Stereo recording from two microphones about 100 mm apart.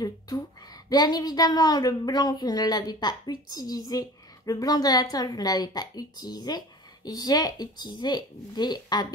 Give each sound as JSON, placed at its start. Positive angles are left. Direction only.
{"t": 0.8, "sound": "speech", "side_deg": 40}